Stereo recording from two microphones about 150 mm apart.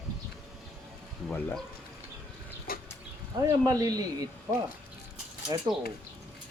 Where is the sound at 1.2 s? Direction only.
5° left (ahead or behind).